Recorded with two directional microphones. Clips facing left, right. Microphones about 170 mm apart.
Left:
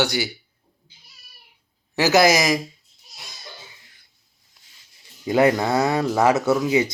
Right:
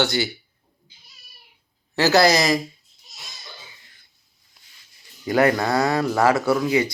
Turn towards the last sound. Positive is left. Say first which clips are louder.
# left 1 dB
turn(degrees=15)  # may be behind; listen again after turning